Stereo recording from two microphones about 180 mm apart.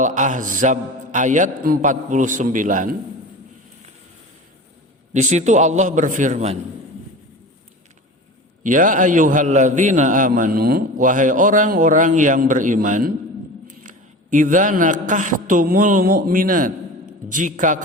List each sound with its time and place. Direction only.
0.0 s a man's voice: 45° right (ahead or behind)
5.1 s a man's voice: 40° right (ahead or behind)
8.6 s a man's voice: 45° right (ahead or behind)